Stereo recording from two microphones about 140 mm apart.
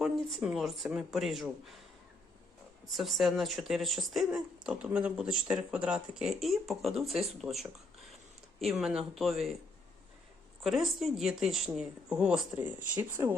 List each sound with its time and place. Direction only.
0.0 s speech: centre (ahead or behind)
2.8 s speech: centre (ahead or behind)
10.6 s speech: centre (ahead or behind)